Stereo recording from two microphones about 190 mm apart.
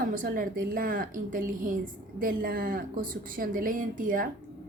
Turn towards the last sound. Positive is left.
turn(degrees=-45)  # may be behind; listen again after turning